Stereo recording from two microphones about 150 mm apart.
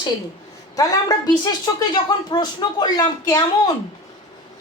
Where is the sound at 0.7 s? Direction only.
25° left (ahead or behind).